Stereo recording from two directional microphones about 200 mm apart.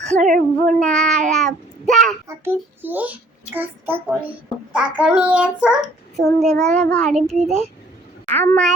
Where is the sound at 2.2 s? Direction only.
10° right (ahead or behind); by 8.7 s 5° left (ahead or behind).